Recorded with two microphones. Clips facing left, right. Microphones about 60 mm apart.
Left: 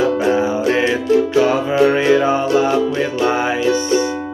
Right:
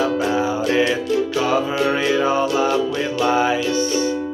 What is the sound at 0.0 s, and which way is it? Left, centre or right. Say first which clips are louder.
Music: left 4 dB; left.